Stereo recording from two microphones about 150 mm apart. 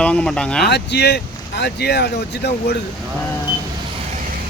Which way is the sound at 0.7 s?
90° left.